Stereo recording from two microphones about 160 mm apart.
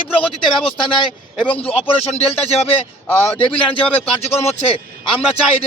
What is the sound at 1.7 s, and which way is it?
Speech, 40° left (ahead or behind).